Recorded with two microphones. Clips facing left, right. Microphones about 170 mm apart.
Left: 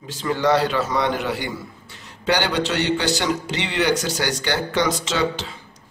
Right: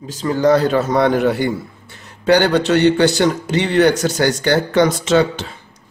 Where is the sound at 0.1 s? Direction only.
40° right (ahead or behind).